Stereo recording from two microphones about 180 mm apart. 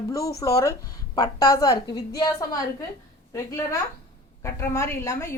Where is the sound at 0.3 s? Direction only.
15° left (ahead or behind).